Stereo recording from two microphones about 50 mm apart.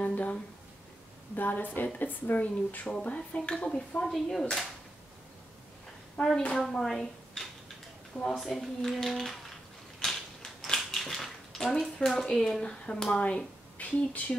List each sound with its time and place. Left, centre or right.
0.0 s a sound: left
1.3 s a woman's voice: left; by 3.5 s centre
4.0 s speech: centre
6.2 s speech: left
6.5 s speech: centre
9.9 s mechanisms: centre
11.8 s speech: centre
13.7 s speech: left